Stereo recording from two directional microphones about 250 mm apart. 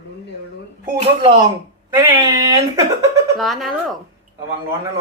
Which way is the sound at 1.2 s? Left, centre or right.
Centre.